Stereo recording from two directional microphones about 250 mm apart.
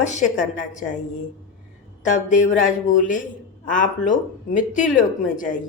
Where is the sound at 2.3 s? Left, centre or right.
Left.